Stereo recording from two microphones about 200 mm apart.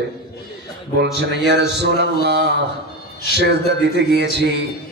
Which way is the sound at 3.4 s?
60° right (ahead or behind).